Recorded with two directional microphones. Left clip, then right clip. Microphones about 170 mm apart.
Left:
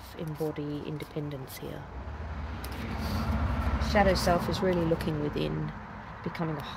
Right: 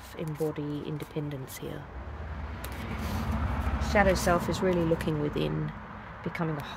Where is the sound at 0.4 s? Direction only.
45° right (ahead or behind).